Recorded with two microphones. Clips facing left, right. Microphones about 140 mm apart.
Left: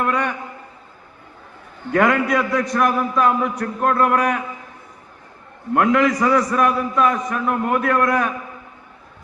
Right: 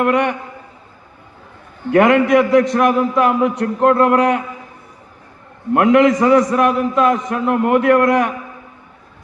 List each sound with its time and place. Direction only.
0.0 s a man's voice: 20° right (ahead or behind)
2.0 s a man's voice: 20° right (ahead or behind)
5.7 s a man's voice: 20° right (ahead or behind)